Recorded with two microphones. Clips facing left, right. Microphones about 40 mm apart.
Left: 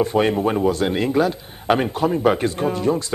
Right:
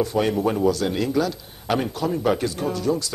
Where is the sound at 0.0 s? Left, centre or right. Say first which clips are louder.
Left 3 dB; left.